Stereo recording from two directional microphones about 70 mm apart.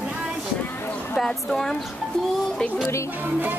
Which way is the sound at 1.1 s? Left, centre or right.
Centre.